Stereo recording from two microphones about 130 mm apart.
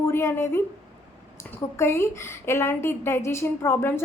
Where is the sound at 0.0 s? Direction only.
20° left (ahead or behind).